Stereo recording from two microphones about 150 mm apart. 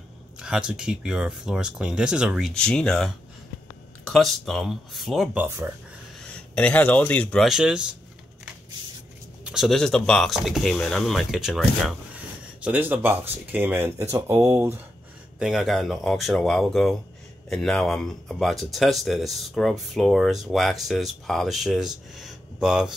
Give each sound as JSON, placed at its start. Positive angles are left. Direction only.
{"t": 0.4, "sound": "speech", "side_deg": -5}
{"t": 6.3, "sound": "speech", "side_deg": 10}
{"t": 7.4, "sound": "speech", "side_deg": -5}
{"t": 9.4, "sound": "speech", "side_deg": -5}
{"t": 15.3, "sound": "speech", "side_deg": -5}